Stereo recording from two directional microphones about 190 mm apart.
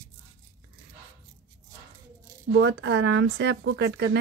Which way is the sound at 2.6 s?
65° right (ahead or behind).